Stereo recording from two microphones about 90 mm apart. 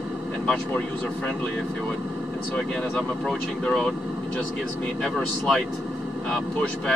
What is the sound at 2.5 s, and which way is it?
Speech, 10° left (ahead or behind).